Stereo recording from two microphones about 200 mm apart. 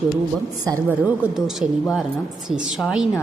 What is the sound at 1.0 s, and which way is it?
Speech, 5° right (ahead or behind).